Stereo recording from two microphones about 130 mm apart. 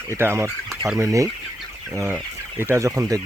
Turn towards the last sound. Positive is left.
turn(degrees=-25)  # may be behind; listen again after turning